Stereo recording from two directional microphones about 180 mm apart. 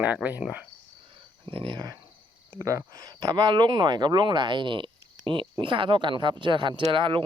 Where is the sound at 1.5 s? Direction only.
30° right (ahead or behind).